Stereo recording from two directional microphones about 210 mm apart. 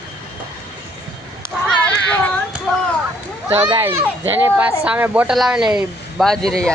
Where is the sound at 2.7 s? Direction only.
5° left (ahead or behind).